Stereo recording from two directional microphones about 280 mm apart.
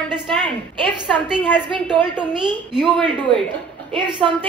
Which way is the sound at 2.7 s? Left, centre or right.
Centre.